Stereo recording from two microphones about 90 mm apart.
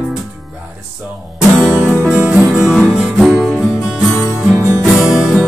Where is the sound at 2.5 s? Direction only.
5° right (ahead or behind).